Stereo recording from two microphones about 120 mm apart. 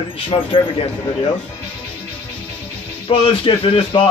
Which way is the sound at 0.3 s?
45° left (ahead or behind).